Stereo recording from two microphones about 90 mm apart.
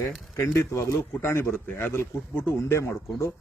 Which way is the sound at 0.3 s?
30° left (ahead or behind).